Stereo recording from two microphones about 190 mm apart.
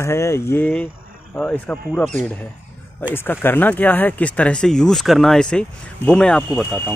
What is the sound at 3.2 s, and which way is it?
Speech, 10° left (ahead or behind).